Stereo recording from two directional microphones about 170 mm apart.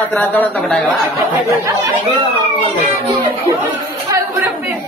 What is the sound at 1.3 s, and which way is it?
Speech, 20° right (ahead or behind).